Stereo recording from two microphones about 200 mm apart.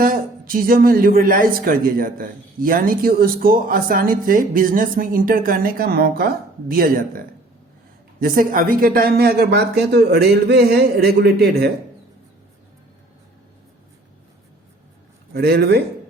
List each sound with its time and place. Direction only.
0.0 s speech: 45° right (ahead or behind)
8.2 s speech: 45° right (ahead or behind)
15.3 s speech: 50° right (ahead or behind)